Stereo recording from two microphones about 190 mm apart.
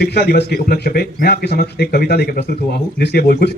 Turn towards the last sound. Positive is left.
turn(degrees=55)  # may be behind; listen again after turning